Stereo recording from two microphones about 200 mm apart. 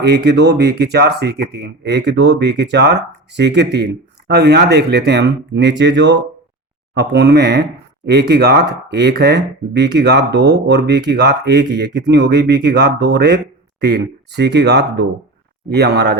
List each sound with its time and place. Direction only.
0.0 s speech: 55° right (ahead or behind)
13.8 s speech: 55° right (ahead or behind)